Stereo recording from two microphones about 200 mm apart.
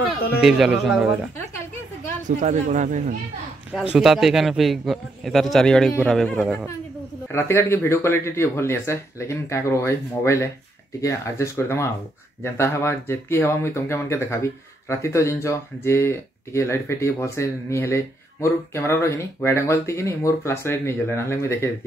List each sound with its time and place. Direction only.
0.4 s a man's voice: 5° right (ahead or behind)
2.2 s speech: 35° right (ahead or behind)
3.7 s a man's voice: 5° right (ahead or behind); by 21.6 s 15° left (ahead or behind)